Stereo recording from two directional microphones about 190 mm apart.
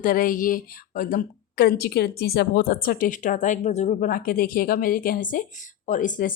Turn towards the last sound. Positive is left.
turn(degrees=45)  # may be behind; listen again after turning